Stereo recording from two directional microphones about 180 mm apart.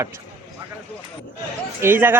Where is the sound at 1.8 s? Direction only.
10° right (ahead or behind).